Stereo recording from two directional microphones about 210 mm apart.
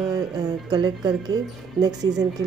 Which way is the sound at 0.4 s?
20° right (ahead or behind).